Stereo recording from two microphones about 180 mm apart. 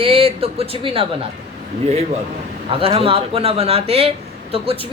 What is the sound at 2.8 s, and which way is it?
Speech, 30° right (ahead or behind).